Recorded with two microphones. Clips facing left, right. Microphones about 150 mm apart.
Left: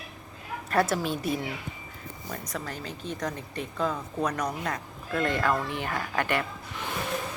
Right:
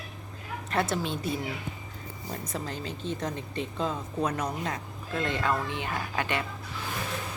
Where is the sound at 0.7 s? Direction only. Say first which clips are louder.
Left 3 dB; 25° right (ahead or behind).